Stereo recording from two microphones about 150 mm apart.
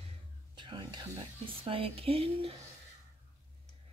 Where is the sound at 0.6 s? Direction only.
30° right (ahead or behind).